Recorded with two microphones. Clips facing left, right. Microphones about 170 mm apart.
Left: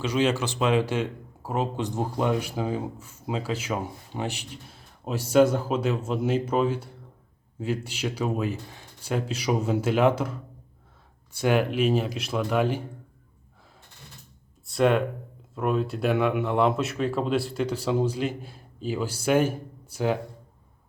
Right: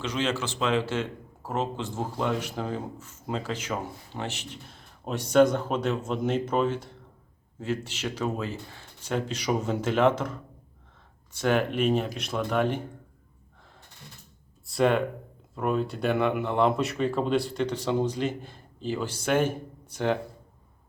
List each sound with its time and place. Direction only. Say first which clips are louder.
0.0 s speech: left 4 dB; 10° left (ahead or behind)
14.7 s speech: left 1 dB; centre (ahead or behind)